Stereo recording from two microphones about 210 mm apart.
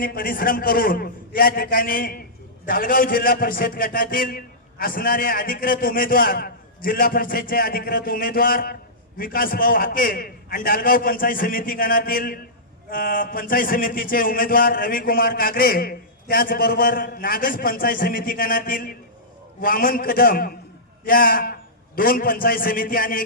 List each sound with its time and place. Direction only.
0.0 s a man's voice: 45° left (ahead or behind)